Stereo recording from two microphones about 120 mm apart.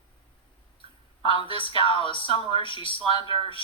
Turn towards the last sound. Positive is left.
turn(degrees=45)  # may be behind; listen again after turning